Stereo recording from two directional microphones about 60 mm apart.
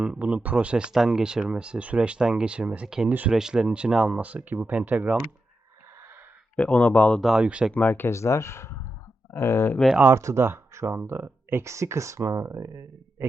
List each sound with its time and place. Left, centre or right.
0.0 s speech: centre
0.9 s speech: centre; by 5.1 s right
6.6 s speech: left
7.3 s speech: centre
7.7 s speech: left
8.0 s speech: left
10.1 s speech: right